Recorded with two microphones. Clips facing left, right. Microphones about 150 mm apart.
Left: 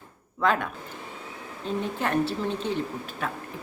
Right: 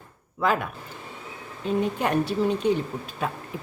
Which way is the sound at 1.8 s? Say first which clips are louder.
Right 1 dB; 15° right (ahead or behind).